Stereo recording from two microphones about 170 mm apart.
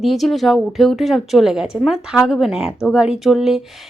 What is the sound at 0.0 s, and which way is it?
Speech, centre (ahead or behind).